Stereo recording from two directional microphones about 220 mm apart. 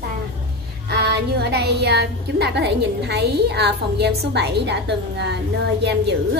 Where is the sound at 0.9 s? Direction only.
50° right (ahead or behind).